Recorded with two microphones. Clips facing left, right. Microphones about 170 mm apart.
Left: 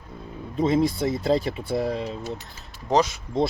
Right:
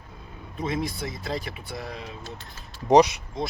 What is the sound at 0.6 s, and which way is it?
Speech, 25° left (ahead or behind).